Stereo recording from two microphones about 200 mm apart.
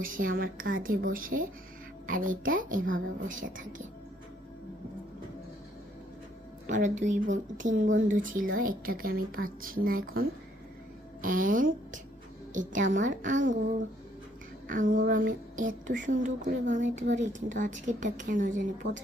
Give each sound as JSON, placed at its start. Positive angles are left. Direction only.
{"t": 0.0, "sound": "a woman's voice", "side_deg": -45}
{"t": 6.7, "sound": "a woman's voice", "side_deg": -40}
{"t": 14.7, "sound": "speech", "side_deg": -45}